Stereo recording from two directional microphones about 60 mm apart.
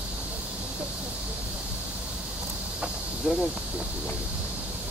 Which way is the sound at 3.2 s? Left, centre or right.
Centre.